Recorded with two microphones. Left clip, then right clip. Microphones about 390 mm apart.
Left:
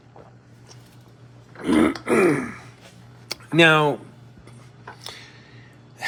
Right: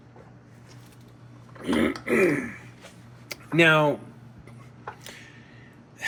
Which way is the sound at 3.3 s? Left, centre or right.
Centre.